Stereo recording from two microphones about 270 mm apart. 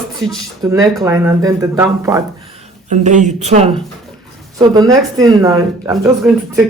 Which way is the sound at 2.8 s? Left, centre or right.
Right.